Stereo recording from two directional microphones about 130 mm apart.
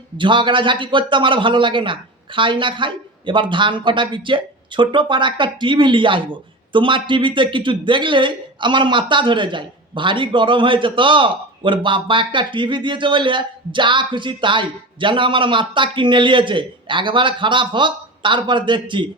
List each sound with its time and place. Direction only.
0.2 s a man's voice: 40° right (ahead or behind)